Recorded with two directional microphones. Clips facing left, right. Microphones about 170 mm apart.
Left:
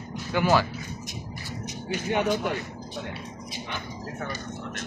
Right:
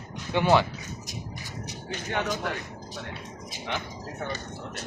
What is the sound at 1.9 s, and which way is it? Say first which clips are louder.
Speech: left 5 dB; 15° left (ahead or behind).